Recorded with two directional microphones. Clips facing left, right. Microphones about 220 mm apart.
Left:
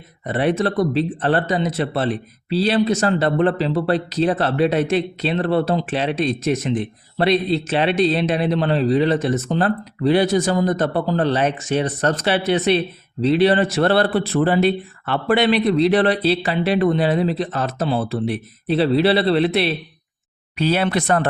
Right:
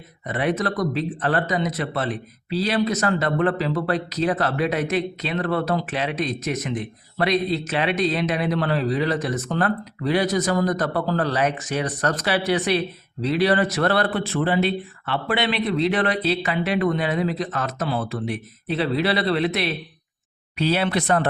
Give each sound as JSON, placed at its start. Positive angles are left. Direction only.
{"t": 0.3, "sound": "speech", "side_deg": 30}
{"t": 20.6, "sound": "speech", "side_deg": 50}